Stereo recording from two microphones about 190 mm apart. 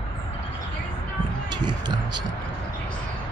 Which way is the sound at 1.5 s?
25° right (ahead or behind).